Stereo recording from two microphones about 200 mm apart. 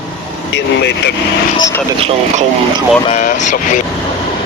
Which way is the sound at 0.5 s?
60° left (ahead or behind).